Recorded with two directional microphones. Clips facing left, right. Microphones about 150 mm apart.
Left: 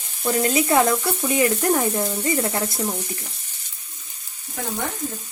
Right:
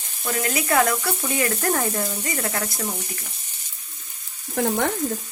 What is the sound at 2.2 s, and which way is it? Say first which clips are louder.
Frying: left 5 dB; 25° left (ahead or behind).